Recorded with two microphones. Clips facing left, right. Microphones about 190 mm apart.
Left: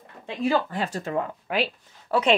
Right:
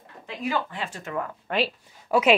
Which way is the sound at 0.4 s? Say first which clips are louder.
Left 5 dB; 35° left (ahead or behind).